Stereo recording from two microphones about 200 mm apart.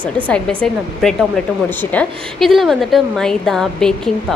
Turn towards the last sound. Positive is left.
turn(degrees=0)  # may be behind; listen again after turning